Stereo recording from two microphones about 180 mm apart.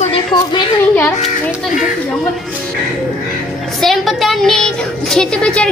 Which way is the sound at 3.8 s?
Centre (ahead or behind).